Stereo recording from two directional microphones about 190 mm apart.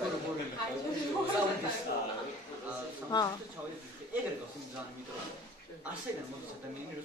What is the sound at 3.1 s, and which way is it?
Speech, 20° left (ahead or behind).